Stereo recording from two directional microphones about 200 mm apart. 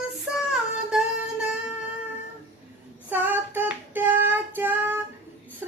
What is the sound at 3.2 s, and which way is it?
Child singing, 10° right (ahead or behind).